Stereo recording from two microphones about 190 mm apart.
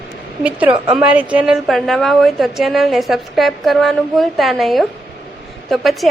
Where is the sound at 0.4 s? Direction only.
5° right (ahead or behind).